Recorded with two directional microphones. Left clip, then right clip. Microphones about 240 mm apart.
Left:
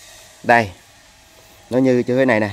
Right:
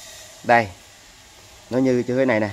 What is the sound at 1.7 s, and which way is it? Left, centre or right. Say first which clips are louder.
Speech: left 4 dB; left.